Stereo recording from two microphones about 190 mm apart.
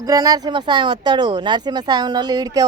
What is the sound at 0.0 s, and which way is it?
Speech, 20° right (ahead or behind).